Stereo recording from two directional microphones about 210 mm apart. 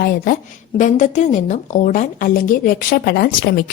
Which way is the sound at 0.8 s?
35° left (ahead or behind).